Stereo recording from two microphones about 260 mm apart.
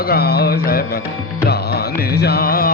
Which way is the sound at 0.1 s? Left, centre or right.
Left.